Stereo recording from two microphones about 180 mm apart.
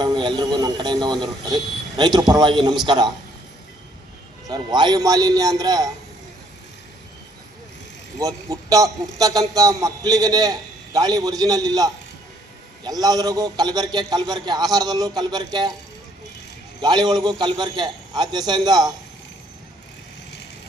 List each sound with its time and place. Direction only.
0.0 s a man's voice: 25° right (ahead or behind)
4.4 s a man's voice: 25° right (ahead or behind)
8.2 s a man's voice: 20° right (ahead or behind)
16.8 s a man's voice: 25° right (ahead or behind)